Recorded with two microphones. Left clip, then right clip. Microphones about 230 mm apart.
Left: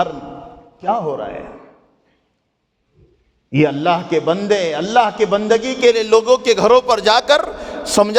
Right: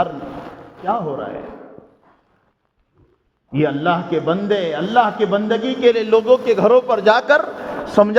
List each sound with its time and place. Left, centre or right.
0.9 s a man's voice: left
3.5 s a man's voice: left